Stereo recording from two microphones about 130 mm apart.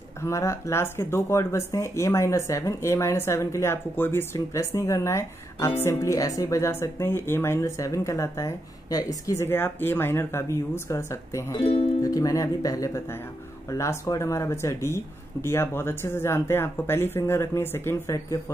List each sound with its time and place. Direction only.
0.2 s speech: 20° left (ahead or behind)